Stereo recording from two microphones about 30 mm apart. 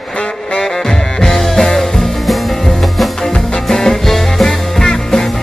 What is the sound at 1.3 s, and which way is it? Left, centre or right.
Music, centre.